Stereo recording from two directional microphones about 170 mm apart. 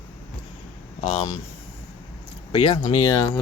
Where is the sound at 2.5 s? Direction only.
30° left (ahead or behind).